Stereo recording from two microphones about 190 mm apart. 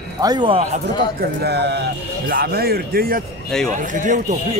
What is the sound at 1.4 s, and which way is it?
A man's voice, 60° right (ahead or behind).